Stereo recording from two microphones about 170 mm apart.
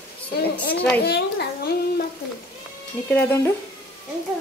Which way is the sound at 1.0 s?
70° left (ahead or behind).